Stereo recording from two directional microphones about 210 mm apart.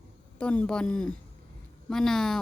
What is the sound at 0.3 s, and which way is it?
Speech, 5° left (ahead or behind).